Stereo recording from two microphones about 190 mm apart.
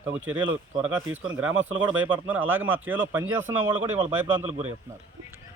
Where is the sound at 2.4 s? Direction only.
90° right.